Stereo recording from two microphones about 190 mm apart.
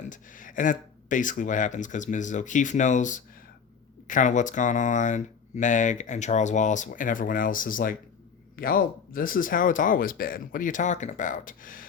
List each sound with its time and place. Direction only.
0.1 s speech: 45° left (ahead or behind)